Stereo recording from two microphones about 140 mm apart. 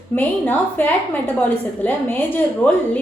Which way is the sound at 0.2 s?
10° left (ahead or behind).